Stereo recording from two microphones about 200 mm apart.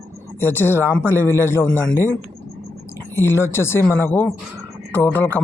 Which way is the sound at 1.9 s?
15° right (ahead or behind).